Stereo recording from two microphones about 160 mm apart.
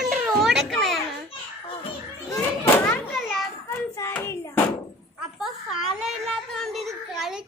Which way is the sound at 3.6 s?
15° left (ahead or behind).